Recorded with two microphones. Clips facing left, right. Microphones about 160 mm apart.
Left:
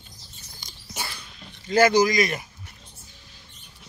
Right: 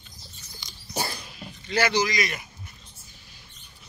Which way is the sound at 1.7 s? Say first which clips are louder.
Left 6 dB; 45° left (ahead or behind).